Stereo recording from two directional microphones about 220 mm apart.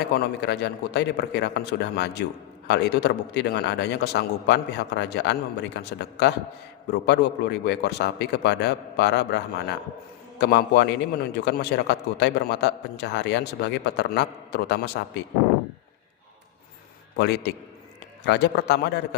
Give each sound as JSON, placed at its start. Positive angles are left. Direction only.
{"t": 0.0, "sound": "a man's voice", "side_deg": 50}
{"t": 17.2, "sound": "a man's voice", "side_deg": 50}